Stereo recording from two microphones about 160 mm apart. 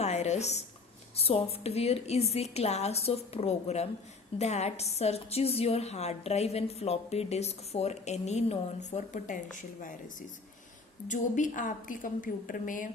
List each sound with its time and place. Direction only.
0.0 s a sound: 45° left (ahead or behind)
1.1 s a woman's voice: 40° left (ahead or behind)
11.1 s a woman's voice: 50° left (ahead or behind)